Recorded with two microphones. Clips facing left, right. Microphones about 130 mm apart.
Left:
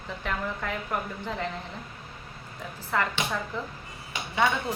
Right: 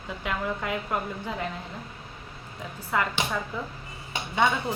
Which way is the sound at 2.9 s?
10° right (ahead or behind).